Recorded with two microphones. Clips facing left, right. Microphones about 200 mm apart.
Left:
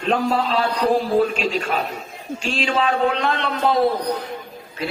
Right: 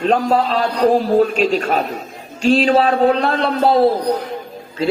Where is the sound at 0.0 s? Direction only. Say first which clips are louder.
Right 5 dB; 40° right (ahead or behind).